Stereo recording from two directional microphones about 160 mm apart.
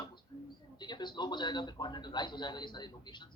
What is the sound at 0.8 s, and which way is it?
A man's voice, 25° left (ahead or behind).